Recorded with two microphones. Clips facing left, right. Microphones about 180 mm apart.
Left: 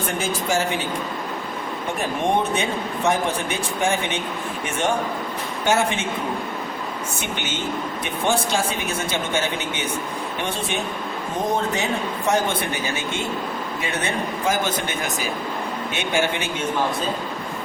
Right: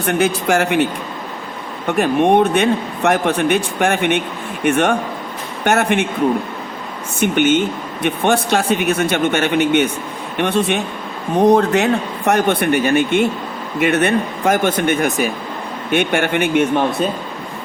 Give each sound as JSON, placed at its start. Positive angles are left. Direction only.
{"t": 0.0, "sound": "a man's voice", "side_deg": -65}
{"t": 1.9, "sound": "a man's voice", "side_deg": -65}
{"t": 7.2, "sound": "a man's voice", "side_deg": -60}